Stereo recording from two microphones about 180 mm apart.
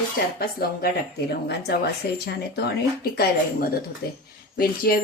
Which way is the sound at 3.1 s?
60° left (ahead or behind).